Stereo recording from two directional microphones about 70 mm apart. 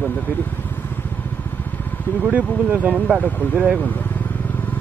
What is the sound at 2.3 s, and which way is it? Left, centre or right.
Speech, right.